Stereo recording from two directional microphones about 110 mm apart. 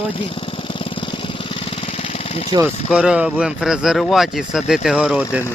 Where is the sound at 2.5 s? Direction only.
40° right (ahead or behind).